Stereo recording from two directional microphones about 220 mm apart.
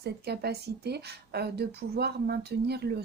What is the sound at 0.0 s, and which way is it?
Speech, 45° right (ahead or behind).